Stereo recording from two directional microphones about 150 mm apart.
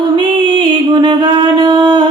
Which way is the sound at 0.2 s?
30° right (ahead or behind).